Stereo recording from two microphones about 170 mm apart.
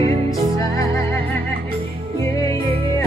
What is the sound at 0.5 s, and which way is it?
Music, 20° left (ahead or behind).